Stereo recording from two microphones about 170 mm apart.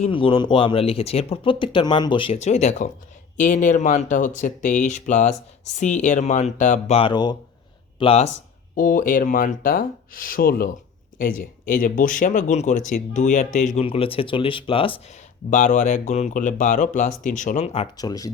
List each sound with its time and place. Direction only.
0.0 s speech: 30° left (ahead or behind)
8.7 s speech: 50° left (ahead or behind); by 14.9 s 30° left (ahead or behind)
15.4 s speech: 50° left (ahead or behind)
17.9 s speech: 20° left (ahead or behind)